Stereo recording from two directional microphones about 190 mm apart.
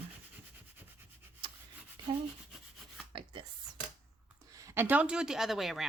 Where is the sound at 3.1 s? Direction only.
25° right (ahead or behind).